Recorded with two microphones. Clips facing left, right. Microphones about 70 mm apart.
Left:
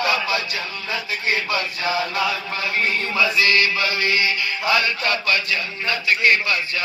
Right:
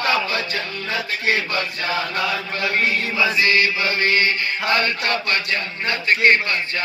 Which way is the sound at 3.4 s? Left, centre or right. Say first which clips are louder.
Even; right.